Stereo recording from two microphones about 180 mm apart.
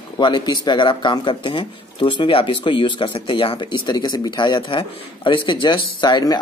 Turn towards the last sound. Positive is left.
turn(degrees=25)  # may be behind; listen again after turning